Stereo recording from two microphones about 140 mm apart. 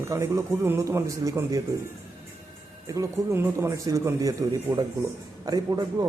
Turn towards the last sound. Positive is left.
turn(degrees=-30)  # may be behind; listen again after turning